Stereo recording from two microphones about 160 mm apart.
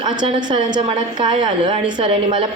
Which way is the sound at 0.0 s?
30° right (ahead or behind).